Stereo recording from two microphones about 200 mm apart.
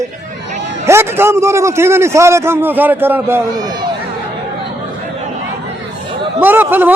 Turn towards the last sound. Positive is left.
turn(degrees=-10)  # may be behind; listen again after turning